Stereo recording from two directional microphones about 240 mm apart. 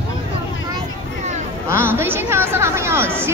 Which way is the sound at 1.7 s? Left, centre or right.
Centre.